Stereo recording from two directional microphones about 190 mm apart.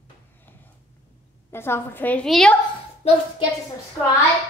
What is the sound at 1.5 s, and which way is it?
A woman's voice, 10° left (ahead or behind).